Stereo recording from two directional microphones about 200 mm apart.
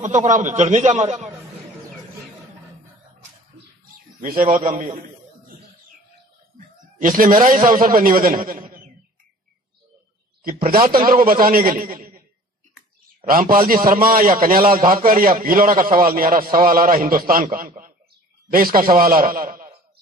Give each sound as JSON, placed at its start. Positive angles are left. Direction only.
{"t": 0.0, "sound": "a man's voice", "side_deg": -35}
{"t": 4.2, "sound": "a man's voice", "side_deg": -40}
{"t": 7.0, "sound": "a man's voice", "side_deg": -40}
{"t": 10.4, "sound": "a man's voice", "side_deg": -40}
{"t": 13.2, "sound": "a man's voice", "side_deg": -45}